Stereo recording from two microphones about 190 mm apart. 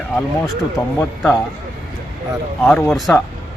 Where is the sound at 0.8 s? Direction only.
20° left (ahead or behind).